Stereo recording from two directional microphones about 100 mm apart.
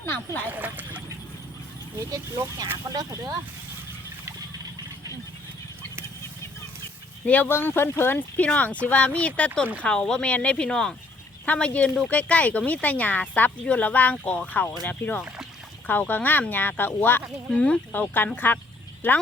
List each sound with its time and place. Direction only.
0.5 s speech: 15° right (ahead or behind)
2.0 s speech: 40° right (ahead or behind)
7.3 s speech: 15° left (ahead or behind)